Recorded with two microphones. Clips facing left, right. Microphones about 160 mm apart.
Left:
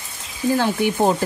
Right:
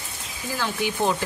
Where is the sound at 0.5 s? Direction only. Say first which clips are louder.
Left 5 dB; 50° left (ahead or behind).